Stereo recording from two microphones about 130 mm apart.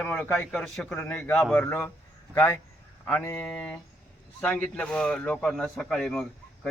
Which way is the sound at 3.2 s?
15° left (ahead or behind).